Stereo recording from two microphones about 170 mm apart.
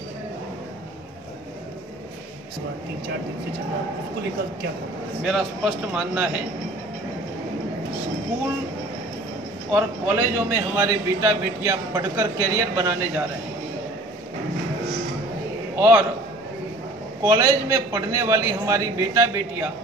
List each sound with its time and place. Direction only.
5.2 s a man's voice: 5° right (ahead or behind)
9.7 s a man's voice: 10° right (ahead or behind)
15.8 s a man's voice: 15° right (ahead or behind)
17.2 s a man's voice: 15° right (ahead or behind)